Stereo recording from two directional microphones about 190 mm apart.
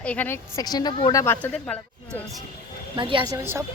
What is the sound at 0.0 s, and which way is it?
A woman's voice, 5° left (ahead or behind).